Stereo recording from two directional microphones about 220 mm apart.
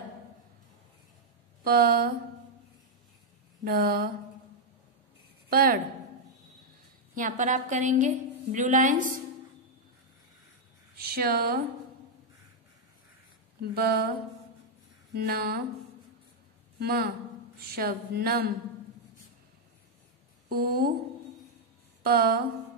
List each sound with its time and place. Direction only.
1.6 s a woman's voice: 45° right (ahead or behind)
3.6 s a woman's voice: 45° right (ahead or behind)
5.5 s a woman's voice: 40° right (ahead or behind)
7.2 s a woman's voice: 35° right (ahead or behind)
11.0 s a woman's voice: 45° right (ahead or behind)
13.6 s a woman's voice: 45° right (ahead or behind)
15.1 s a woman's voice: 45° right (ahead or behind)
16.8 s a woman's voice: 45° right (ahead or behind)
20.4 s a woman's voice: 45° right (ahead or behind)
22.0 s a woman's voice: 45° right (ahead or behind)